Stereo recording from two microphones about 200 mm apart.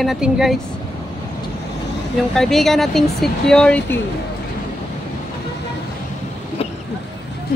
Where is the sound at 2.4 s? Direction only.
Centre (ahead or behind).